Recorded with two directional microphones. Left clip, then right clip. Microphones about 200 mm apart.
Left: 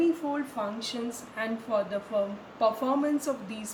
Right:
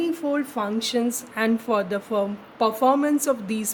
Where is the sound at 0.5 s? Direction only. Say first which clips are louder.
Right 8 dB; 55° right (ahead or behind).